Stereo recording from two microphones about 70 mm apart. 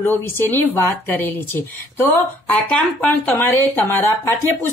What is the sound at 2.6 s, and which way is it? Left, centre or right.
Speech, centre.